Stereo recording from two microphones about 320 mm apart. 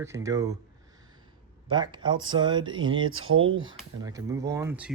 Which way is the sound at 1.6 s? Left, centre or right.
Centre.